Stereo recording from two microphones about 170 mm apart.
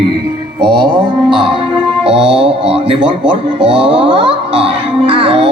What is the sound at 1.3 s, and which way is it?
Music, 30° right (ahead or behind).